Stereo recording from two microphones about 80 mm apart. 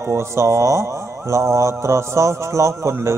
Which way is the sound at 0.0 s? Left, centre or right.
Right.